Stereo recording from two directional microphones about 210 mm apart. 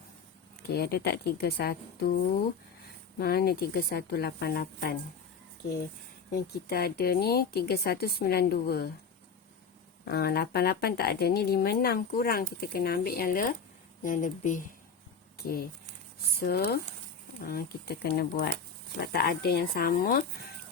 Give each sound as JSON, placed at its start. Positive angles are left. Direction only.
{"t": 0.7, "sound": "speech", "side_deg": 45}
{"t": 6.5, "sound": "speech", "side_deg": 50}
{"t": 10.1, "sound": "speech", "side_deg": 50}
{"t": 16.4, "sound": "speech", "side_deg": 50}